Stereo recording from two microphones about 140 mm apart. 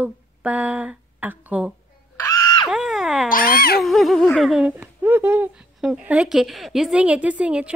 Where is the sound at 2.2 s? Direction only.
25° left (ahead or behind).